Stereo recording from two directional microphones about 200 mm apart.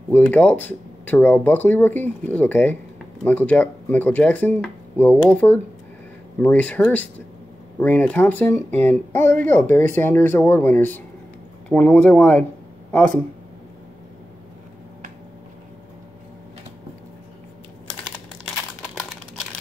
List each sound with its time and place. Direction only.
0.1 s speech: 10° left (ahead or behind)